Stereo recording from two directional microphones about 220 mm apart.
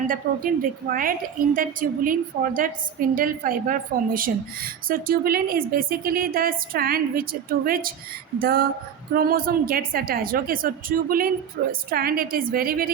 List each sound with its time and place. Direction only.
0.1 s a woman's voice: 40° right (ahead or behind)
8.4 s female singing: 45° right (ahead or behind)
9.1 s a woman's voice: 40° right (ahead or behind)